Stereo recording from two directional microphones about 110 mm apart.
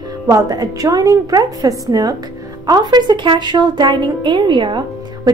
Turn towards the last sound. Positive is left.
turn(degrees=-40)  # may be behind; listen again after turning